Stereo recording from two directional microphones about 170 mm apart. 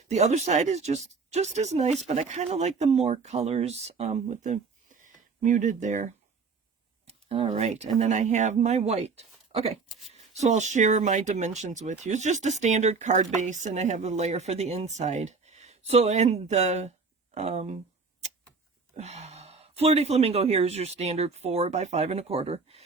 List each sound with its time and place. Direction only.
0.1 s speech: 40° right (ahead or behind)
7.1 s speech: 35° right (ahead or behind)
18.9 s speech: 40° right (ahead or behind)